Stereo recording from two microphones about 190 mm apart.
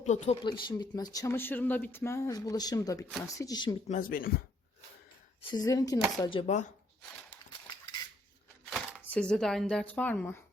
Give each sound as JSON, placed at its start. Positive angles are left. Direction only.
{"t": 0.0, "sound": "speech", "side_deg": 40}
{"t": 0.4, "sound": "speech", "side_deg": 20}
{"t": 3.8, "sound": "speech", "side_deg": 45}
{"t": 5.5, "sound": "speech", "side_deg": 20}
{"t": 8.7, "sound": "a sound", "side_deg": -5}
{"t": 9.0, "sound": "a woman's voice", "side_deg": 5}